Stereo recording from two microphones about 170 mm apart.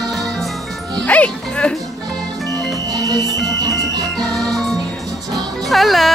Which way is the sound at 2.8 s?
20° right (ahead or behind).